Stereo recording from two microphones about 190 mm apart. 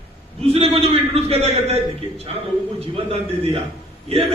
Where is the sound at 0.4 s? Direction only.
30° right (ahead or behind).